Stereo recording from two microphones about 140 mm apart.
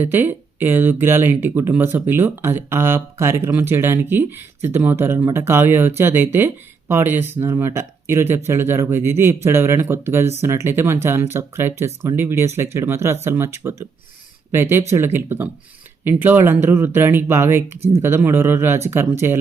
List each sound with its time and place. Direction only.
0.0 s speech: 15° right (ahead or behind)